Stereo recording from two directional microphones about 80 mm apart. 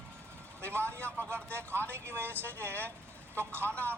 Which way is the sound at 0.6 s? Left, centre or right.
Left.